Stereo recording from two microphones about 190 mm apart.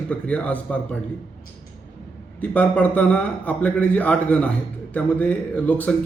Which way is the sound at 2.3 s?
5° left (ahead or behind).